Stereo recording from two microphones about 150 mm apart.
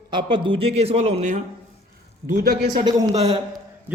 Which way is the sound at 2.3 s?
75° right (ahead or behind).